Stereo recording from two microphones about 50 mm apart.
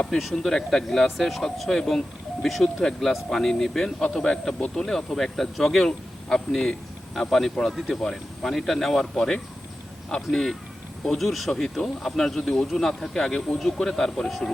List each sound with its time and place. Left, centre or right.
0.1 s speech: centre